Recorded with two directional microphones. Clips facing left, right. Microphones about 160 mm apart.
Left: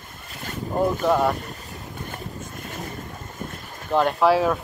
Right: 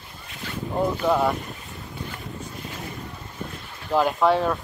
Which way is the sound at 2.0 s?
50° left (ahead or behind).